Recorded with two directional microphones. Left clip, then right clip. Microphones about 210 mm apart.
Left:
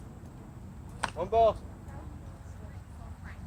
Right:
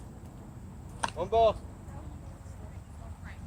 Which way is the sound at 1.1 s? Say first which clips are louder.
Even; 30° right (ahead or behind).